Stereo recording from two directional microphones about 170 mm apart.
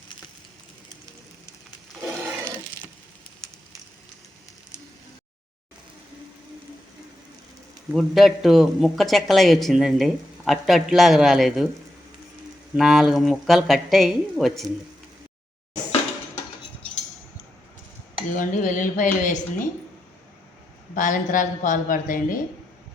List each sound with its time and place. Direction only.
2.0 s a sound: 10° right (ahead or behind)
7.9 s speech: centre (ahead or behind)
12.7 s speech: centre (ahead or behind)
18.3 s a woman's voice: 50° left (ahead or behind)
20.9 s a woman's voice: 50° left (ahead or behind)